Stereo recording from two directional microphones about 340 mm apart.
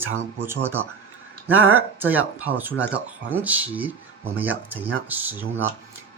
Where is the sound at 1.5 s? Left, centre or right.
Right.